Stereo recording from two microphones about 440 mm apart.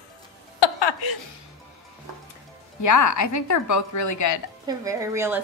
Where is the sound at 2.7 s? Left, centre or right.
Left.